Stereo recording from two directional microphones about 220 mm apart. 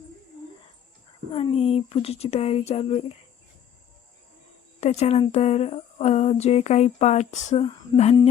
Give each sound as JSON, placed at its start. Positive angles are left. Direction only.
{"t": 1.3, "sound": "speech", "side_deg": 25}
{"t": 4.8, "sound": "speech", "side_deg": 30}